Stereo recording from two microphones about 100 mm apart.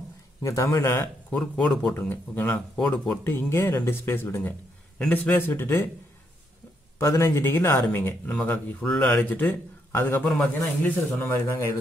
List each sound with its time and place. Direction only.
0.4 s a man's voice: 30° left (ahead or behind)
1.3 s speech: 5° left (ahead or behind)
3.3 s speech: 25° left (ahead or behind)
7.0 s speech: 25° left (ahead or behind)
10.4 s speech: 5° left (ahead or behind)
11.1 s speech: 25° left (ahead or behind)